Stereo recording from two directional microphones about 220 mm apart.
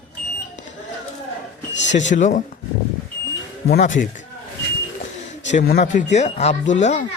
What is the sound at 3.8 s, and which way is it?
Speech, 35° left (ahead or behind).